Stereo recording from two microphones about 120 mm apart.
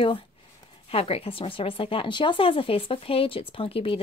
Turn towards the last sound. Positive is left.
turn(degrees=50)  # may be behind; listen again after turning